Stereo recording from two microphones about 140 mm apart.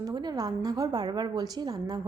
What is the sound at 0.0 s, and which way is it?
A woman's voice, 30° right (ahead or behind).